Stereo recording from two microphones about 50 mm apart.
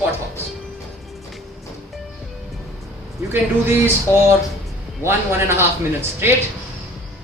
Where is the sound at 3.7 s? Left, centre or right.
Right.